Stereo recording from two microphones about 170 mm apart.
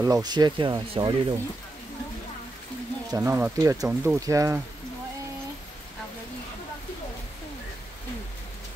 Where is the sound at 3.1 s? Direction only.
15° right (ahead or behind).